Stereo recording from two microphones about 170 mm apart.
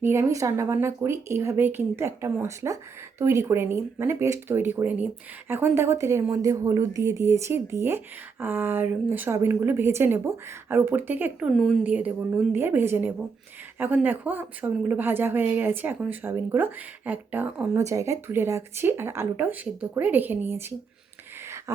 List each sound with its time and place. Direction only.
0.0 s a woman's voice: 15° right (ahead or behind)